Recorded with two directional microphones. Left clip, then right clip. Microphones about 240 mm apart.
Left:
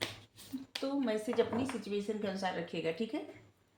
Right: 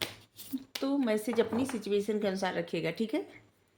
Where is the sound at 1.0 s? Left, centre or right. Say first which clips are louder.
Right 3 dB; right.